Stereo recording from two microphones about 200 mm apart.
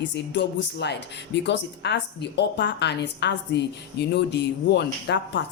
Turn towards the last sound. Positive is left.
turn(degrees=60)  # may be behind; listen again after turning